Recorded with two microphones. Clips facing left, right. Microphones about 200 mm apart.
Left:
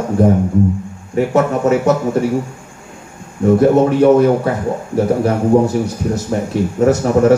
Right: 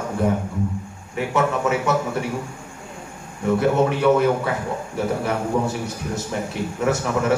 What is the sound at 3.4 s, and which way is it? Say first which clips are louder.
A man's voice: left 8 dB; 40° left (ahead or behind).